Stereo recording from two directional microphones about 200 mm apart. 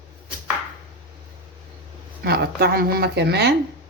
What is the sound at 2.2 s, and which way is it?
Speech, 55° right (ahead or behind).